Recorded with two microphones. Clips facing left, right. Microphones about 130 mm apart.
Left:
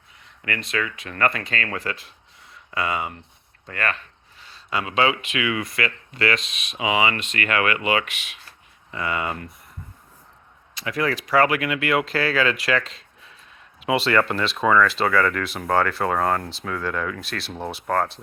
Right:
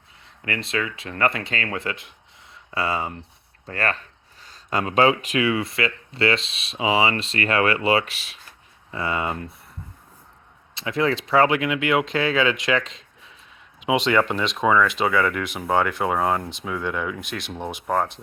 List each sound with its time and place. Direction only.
0.4 s speech: 25° right (ahead or behind)
10.8 s speech: 25° right (ahead or behind)